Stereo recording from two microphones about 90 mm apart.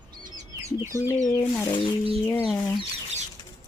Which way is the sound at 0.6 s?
35° right (ahead or behind).